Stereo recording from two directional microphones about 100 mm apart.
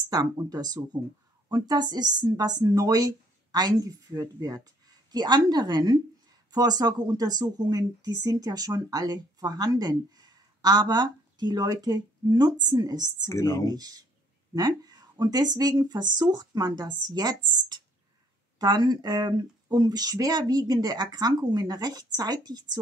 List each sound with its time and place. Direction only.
0.1 s speech: 40° right (ahead or behind)
13.3 s speech: 30° left (ahead or behind)
13.7 s speech: 40° right (ahead or behind)